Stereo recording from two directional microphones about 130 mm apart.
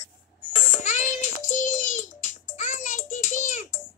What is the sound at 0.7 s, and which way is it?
Child singing, 65° left (ahead or behind).